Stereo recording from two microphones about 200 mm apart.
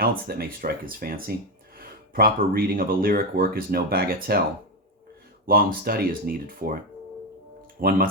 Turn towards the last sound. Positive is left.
turn(degrees=-50)  # may be behind; listen again after turning